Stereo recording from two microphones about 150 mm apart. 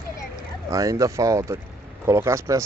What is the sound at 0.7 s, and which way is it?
Speech, 20° right (ahead or behind).